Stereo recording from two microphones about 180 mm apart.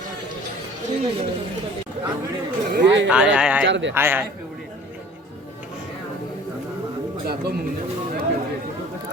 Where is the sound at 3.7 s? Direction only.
90° right.